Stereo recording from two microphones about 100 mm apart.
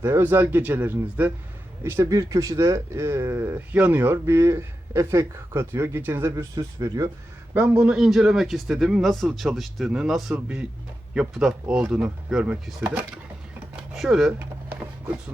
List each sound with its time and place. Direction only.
0.0 s speech: 25° right (ahead or behind)
6.6 s speech: 40° right (ahead or behind)
7.5 s a man's voice: 15° right (ahead or behind)
10.3 s speech: 15° right (ahead or behind)
13.9 s speech: 5° right (ahead or behind)